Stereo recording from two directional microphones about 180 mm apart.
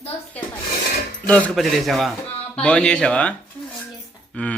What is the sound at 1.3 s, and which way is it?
Speech, centre (ahead or behind).